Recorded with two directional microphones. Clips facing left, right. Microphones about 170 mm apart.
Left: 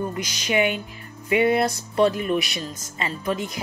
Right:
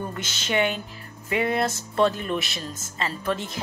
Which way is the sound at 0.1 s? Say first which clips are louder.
Left 3 dB; 10° left (ahead or behind).